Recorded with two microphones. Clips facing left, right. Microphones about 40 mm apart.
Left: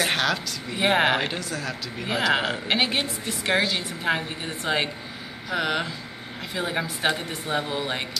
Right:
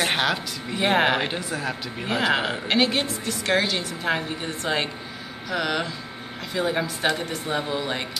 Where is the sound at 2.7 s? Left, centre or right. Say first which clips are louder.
Right 3 dB; centre.